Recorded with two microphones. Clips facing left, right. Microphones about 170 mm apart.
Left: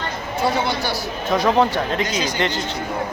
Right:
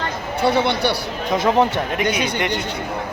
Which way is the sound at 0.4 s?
65° right (ahead or behind).